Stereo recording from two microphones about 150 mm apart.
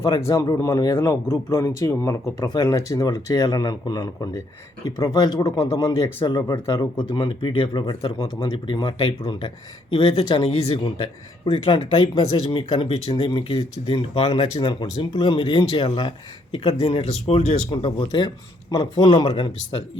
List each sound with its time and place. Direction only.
0.3 s speech: 20° left (ahead or behind)
7.1 s speech: 30° left (ahead or behind)